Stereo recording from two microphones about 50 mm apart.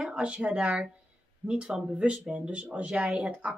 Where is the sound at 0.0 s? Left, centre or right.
Right.